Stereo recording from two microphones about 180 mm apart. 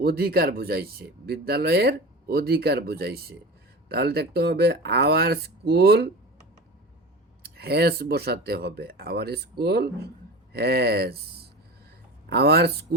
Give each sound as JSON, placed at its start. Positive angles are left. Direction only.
{"t": 0.0, "sound": "speech", "side_deg": -60}
{"t": 7.4, "sound": "speech", "side_deg": -60}
{"t": 12.3, "sound": "speech", "side_deg": -60}